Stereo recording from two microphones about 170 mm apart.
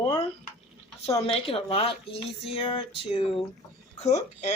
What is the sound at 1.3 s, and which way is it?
Speech, 35° left (ahead or behind).